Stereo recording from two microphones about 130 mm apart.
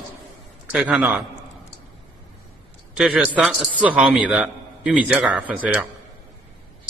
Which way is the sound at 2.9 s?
5° right (ahead or behind).